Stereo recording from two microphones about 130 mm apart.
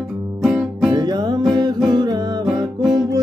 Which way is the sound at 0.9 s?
30° right (ahead or behind).